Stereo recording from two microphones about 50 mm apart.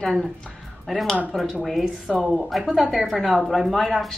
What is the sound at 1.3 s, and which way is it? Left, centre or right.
A woman's voice, centre.